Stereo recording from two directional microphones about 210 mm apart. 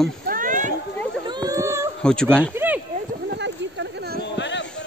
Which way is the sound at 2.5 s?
10° right (ahead or behind).